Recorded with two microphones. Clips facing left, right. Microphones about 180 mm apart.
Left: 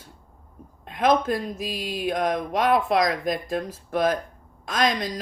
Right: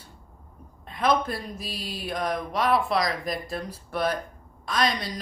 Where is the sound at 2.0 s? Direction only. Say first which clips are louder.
Left 4 dB; 50° left (ahead or behind).